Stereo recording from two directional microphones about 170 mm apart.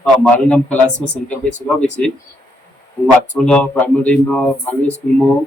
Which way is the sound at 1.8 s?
5° left (ahead or behind).